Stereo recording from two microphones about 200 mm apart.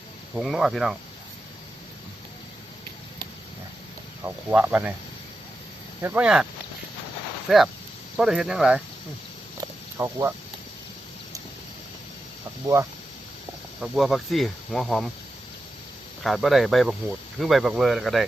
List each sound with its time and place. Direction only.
0.3 s speech: centre (ahead or behind)
4.2 s speech: 10° right (ahead or behind)
6.0 s speech: 10° right (ahead or behind)
9.6 s a sound: 15° right (ahead or behind)
13.8 s speech: centre (ahead or behind)
16.2 s speech: centre (ahead or behind)